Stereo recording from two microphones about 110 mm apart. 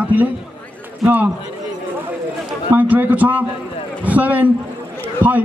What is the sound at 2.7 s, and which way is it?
A man's voice, 15° right (ahead or behind).